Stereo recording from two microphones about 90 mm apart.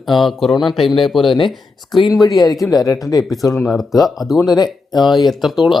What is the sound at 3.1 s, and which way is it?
Speech, 45° left (ahead or behind).